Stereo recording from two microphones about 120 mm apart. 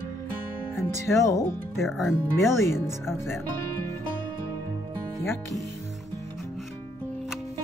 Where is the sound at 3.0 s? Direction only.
20° left (ahead or behind).